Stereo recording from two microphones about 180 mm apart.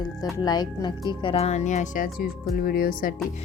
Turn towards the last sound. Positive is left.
turn(degrees=50)  # may be behind; listen again after turning